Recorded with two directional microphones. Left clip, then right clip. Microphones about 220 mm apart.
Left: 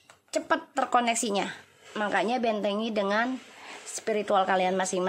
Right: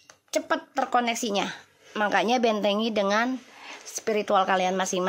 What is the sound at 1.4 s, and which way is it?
Speech, 15° right (ahead or behind).